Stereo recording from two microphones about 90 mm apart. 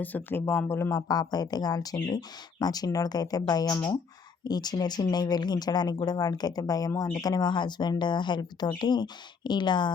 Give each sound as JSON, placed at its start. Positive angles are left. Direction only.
{"t": 0.0, "sound": "speech", "side_deg": 20}
{"t": 0.9, "sound": "speech", "side_deg": 45}